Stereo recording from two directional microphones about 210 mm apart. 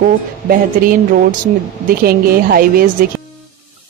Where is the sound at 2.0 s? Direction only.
45° right (ahead or behind).